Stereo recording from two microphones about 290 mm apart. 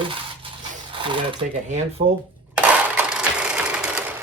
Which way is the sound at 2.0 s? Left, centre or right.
Right.